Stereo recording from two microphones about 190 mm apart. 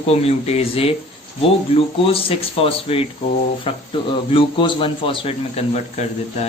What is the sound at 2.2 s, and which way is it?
A man's voice, 30° left (ahead or behind).